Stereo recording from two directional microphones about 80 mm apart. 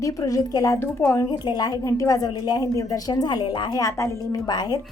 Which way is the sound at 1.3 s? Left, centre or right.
Left.